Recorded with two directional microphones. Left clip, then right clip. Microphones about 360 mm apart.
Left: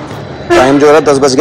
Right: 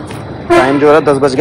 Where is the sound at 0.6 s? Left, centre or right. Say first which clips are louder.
Left 4 dB; centre.